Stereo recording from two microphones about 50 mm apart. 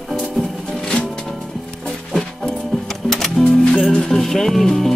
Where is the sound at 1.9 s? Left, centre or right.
Centre.